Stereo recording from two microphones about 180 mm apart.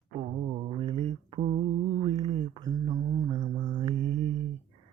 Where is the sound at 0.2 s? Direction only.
30° right (ahead or behind).